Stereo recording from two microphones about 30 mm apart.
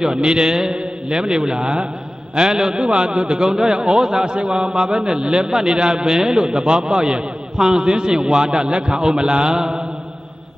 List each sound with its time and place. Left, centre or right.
0.0 s a man's voice: right
2.7 s a man's voice: right
4.4 s a man's voice: right
6.4 s a man's voice: right